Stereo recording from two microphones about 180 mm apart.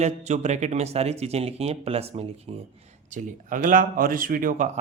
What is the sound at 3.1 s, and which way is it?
Speech, 45° right (ahead or behind).